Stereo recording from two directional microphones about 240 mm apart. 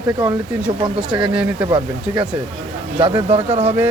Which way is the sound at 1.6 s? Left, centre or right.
Centre.